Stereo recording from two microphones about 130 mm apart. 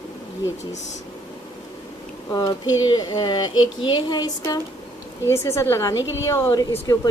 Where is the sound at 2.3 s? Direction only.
30° left (ahead or behind).